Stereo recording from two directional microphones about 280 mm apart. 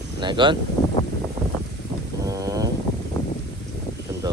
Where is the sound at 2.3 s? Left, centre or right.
Centre.